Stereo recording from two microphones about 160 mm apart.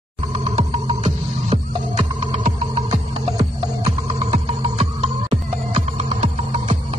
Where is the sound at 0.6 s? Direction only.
40° right (ahead or behind).